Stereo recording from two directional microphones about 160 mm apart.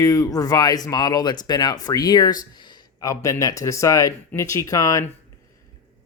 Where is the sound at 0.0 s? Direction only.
20° left (ahead or behind).